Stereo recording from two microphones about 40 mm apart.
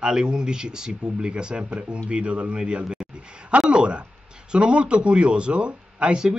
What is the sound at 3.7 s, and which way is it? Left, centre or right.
Speech, right.